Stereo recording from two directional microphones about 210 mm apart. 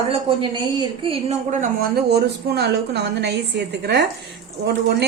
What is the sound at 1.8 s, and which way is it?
A woman's voice, 50° right (ahead or behind).